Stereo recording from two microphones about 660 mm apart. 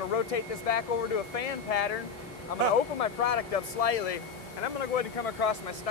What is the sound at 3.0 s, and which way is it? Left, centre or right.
Speech, left.